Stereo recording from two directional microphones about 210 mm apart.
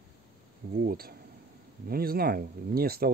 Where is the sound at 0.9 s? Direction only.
45° right (ahead or behind).